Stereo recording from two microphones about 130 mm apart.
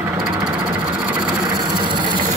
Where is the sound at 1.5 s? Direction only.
35° right (ahead or behind).